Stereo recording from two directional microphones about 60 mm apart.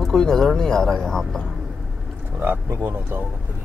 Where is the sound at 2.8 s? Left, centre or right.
Right.